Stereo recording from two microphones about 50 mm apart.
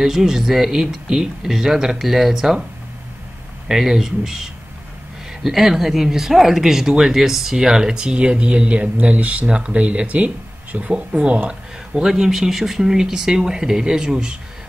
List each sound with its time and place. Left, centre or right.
0.0 s speech: centre
3.6 s speech: centre; by 11.5 s right
11.9 s speech: centre